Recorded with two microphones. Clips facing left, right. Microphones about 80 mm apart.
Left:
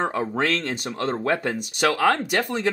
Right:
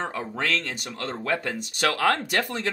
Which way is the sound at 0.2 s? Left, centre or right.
Left.